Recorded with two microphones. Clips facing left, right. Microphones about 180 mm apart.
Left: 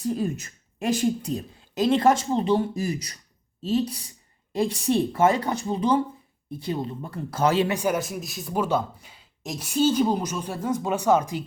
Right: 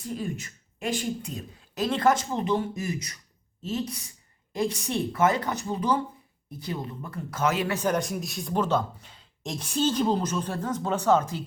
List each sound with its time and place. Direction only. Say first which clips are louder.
0.0 s speech: left 6 dB; 40° left (ahead or behind)
7.7 s a man's voice: left 1 dB; 10° left (ahead or behind)